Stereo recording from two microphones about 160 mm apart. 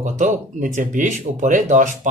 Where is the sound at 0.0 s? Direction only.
50° right (ahead or behind).